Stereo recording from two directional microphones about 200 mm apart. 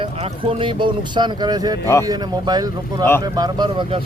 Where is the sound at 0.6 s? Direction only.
25° right (ahead or behind).